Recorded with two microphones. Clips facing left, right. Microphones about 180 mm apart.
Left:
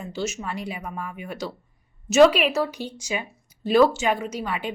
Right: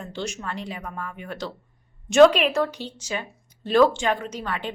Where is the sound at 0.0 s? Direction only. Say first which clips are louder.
Left 2 dB; 5° left (ahead or behind).